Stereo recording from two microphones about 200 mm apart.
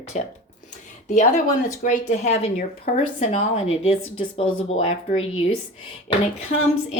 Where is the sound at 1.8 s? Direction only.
35° left (ahead or behind).